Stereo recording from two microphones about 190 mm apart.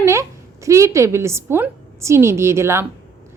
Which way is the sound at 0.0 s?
15° right (ahead or behind).